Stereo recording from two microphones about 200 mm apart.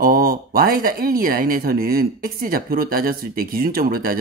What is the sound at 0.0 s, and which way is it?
Speech, 45° right (ahead or behind).